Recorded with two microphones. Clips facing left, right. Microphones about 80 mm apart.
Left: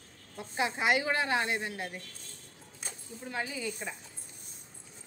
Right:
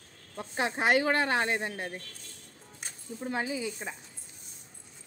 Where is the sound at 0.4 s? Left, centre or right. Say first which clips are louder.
Right 2 dB; right.